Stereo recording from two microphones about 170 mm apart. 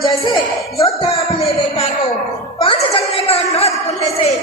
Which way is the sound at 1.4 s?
30° left (ahead or behind).